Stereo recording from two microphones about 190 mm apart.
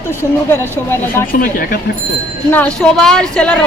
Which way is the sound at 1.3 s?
50° left (ahead or behind).